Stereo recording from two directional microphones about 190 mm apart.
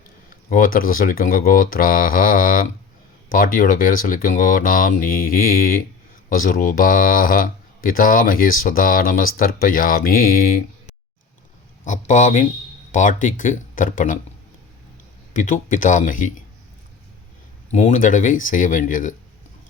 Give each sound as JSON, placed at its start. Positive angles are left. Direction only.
{"t": 0.5, "sound": "speech", "side_deg": 50}
{"t": 11.9, "sound": "speech", "side_deg": 40}
{"t": 15.3, "sound": "speech", "side_deg": 40}
{"t": 17.7, "sound": "speech", "side_deg": 35}